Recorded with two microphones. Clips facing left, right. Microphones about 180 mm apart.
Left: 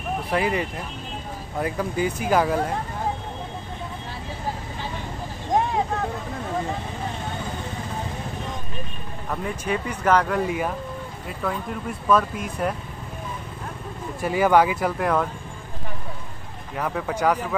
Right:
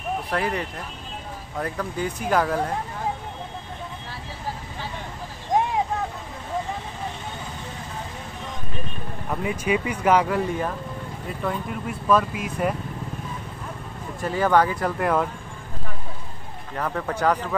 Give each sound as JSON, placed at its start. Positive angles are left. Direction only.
{"t": 0.3, "sound": "speech", "side_deg": 5}
{"t": 9.3, "sound": "speech", "side_deg": -10}
{"t": 12.1, "sound": "speech", "side_deg": 0}
{"t": 14.2, "sound": "speech", "side_deg": 10}
{"t": 16.7, "sound": "speech", "side_deg": 10}